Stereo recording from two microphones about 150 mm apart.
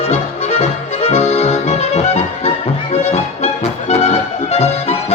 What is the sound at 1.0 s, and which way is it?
Accordion, 45° left (ahead or behind).